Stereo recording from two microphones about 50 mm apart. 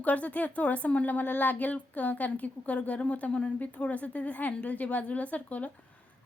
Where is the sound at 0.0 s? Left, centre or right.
Left.